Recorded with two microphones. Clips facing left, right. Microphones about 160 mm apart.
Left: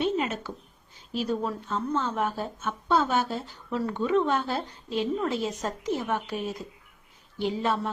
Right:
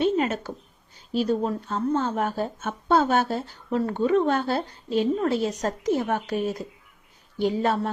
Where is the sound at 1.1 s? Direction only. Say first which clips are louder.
Right 5 dB; 35° right (ahead or behind).